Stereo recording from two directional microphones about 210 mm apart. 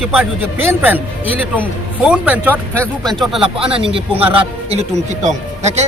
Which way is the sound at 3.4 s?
25° right (ahead or behind).